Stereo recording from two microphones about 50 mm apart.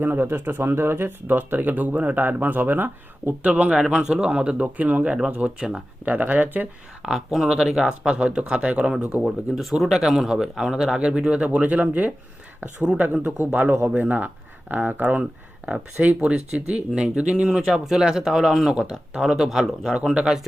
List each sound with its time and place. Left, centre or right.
0.0 s speech: right
3.4 s speech: right
3.8 s speech: centre; by 5.1 s right
5.5 s speech: centre
6.1 s speech: right
7.0 s speech: centre
11.4 s speech: right
13.2 s speech: right; by 20.0 s centre
20.1 s speech: centre